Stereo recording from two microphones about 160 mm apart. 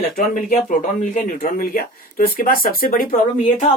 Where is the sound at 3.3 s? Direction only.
50° left (ahead or behind).